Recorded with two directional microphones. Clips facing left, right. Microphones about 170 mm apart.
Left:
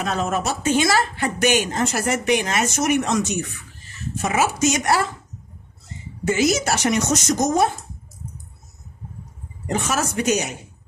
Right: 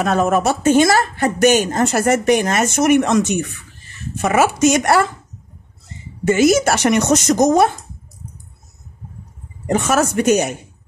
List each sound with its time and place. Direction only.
0.0 s a woman's voice: 55° right (ahead or behind)
6.2 s a woman's voice: 55° right (ahead or behind)
9.7 s speech: 55° right (ahead or behind)